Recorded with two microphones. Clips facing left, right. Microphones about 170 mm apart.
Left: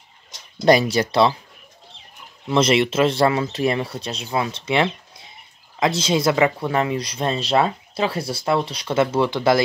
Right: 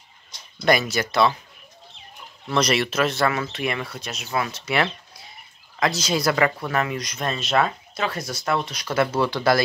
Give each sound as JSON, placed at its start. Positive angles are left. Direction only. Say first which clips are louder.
{"t": 0.7, "sound": "speech", "louder": "left 5 dB", "side_deg": 30}
{"t": 2.4, "sound": "speech", "louder": "left 4 dB", "side_deg": 25}